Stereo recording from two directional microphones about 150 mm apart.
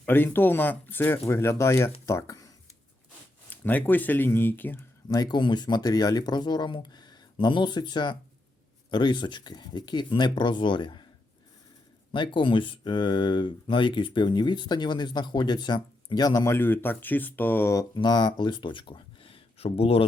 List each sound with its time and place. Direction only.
0.0 s speech: 10° left (ahead or behind)
3.5 s speech: 10° left (ahead or behind)
5.0 s speech: 25° left (ahead or behind)
12.1 s speech: 35° left (ahead or behind); by 17.8 s 20° left (ahead or behind)
17.9 s speech: 30° left (ahead or behind)